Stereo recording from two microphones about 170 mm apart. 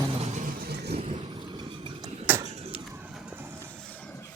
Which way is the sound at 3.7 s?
5° left (ahead or behind).